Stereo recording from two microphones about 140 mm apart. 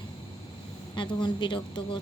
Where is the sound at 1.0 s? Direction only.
35° left (ahead or behind).